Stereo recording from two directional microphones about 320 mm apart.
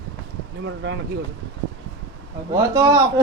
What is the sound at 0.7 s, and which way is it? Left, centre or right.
Speech, right.